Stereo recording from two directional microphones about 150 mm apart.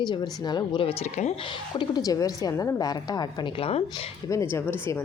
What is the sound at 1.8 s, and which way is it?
Speech, 25° left (ahead or behind).